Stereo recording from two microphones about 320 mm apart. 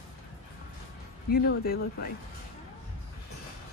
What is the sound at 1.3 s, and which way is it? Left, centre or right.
Speech, left.